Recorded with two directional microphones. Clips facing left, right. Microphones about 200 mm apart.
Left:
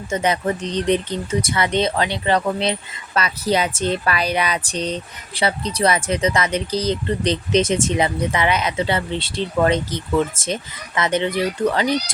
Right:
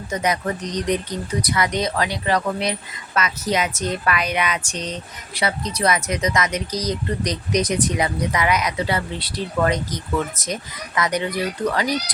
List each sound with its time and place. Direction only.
0.1 s speech: 30° left (ahead or behind)